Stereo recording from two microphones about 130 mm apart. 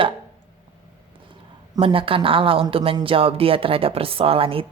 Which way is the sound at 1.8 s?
45° right (ahead or behind).